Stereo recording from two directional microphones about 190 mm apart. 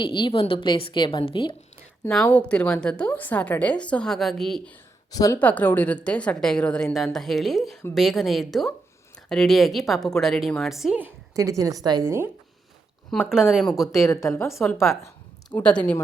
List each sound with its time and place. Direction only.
0.0 s a woman's voice: 25° left (ahead or behind)
2.0 s a woman's voice: 5° left (ahead or behind)
5.1 s a woman's voice: 20° left (ahead or behind)
5.4 s a woman's voice: 10° left (ahead or behind); by 12.3 s 15° right (ahead or behind)
13.1 s a woman's voice: centre (ahead or behind)
13.9 s speech: 15° left (ahead or behind)
14.5 s a woman's voice: centre (ahead or behind)
14.8 s a sound: 15° left (ahead or behind)